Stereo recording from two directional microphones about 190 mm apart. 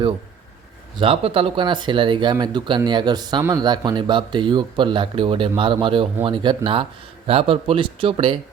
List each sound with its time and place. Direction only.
0.9 s speech: 30° right (ahead or behind)